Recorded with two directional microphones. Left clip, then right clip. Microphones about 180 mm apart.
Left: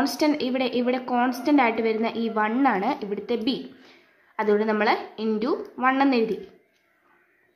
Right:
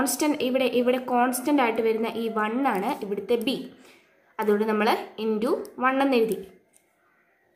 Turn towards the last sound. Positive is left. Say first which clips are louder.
# left 1 dB
turn(degrees=15)  # may be behind; listen again after turning